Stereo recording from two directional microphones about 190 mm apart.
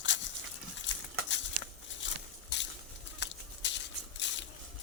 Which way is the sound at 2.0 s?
70° left (ahead or behind).